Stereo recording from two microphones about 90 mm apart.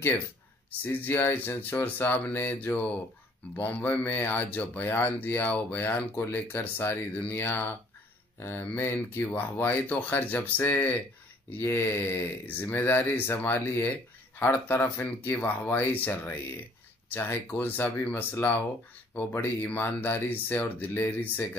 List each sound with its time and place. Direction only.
0.7 s speech: 25° left (ahead or behind)